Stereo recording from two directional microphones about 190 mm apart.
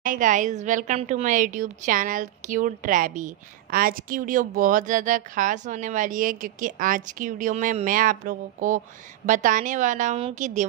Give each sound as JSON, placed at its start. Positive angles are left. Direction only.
{"t": 0.0, "sound": "a woman's voice", "side_deg": -45}